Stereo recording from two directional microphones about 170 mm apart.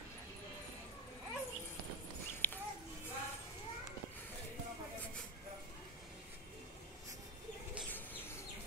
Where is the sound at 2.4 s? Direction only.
10° left (ahead or behind).